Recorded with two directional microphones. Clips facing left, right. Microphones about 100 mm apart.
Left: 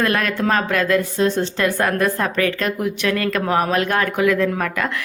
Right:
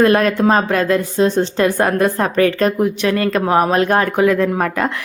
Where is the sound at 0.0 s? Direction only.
30° right (ahead or behind).